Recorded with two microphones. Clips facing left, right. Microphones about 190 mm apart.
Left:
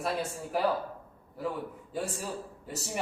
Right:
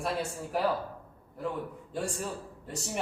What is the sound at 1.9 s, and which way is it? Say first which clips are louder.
Speech: right 1 dB; 5° left (ahead or behind).